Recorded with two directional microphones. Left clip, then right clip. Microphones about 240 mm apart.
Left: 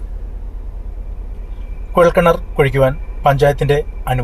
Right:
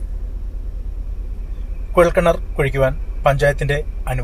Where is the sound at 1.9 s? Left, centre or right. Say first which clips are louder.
Left 3 dB; centre.